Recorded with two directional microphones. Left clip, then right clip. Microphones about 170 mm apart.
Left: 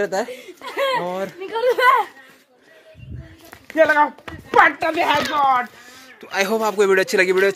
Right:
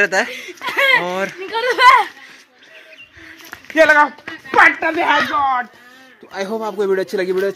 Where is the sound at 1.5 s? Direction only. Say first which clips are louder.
Right 5 dB; 40° right (ahead or behind).